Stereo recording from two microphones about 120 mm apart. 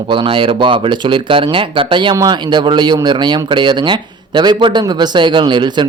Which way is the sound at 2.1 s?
35° right (ahead or behind).